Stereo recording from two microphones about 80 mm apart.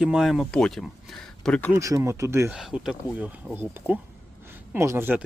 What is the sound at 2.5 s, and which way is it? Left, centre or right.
Speech, centre.